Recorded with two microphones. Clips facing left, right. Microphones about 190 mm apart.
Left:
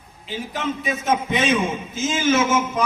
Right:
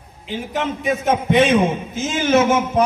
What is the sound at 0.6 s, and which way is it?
A man's voice, 60° right (ahead or behind).